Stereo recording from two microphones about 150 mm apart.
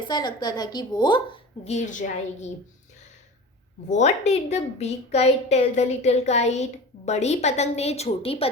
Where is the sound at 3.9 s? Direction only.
50° left (ahead or behind).